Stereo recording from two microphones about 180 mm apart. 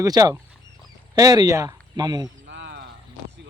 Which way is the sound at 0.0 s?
20° right (ahead or behind).